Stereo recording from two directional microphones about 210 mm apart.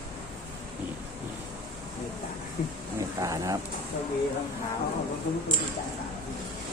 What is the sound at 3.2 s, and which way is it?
Speech, 15° right (ahead or behind).